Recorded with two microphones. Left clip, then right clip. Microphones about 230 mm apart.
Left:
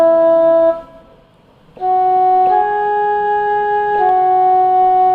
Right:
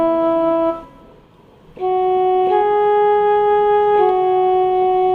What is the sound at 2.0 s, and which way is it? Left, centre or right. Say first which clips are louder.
Organ: left 4 dB; left.